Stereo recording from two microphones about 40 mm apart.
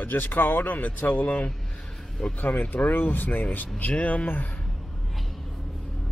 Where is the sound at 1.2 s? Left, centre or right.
Left.